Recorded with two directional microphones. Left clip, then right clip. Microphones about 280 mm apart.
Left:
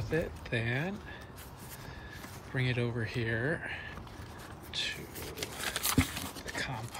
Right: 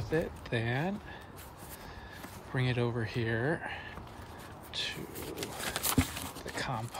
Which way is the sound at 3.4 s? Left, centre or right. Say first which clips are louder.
Right 1 dB; right.